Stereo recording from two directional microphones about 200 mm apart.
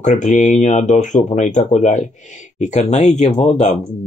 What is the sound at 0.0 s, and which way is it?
Speech, 35° left (ahead or behind).